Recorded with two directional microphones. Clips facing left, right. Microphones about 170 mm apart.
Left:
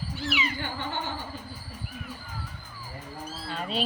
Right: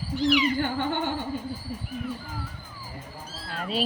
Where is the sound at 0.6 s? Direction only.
55° right (ahead or behind).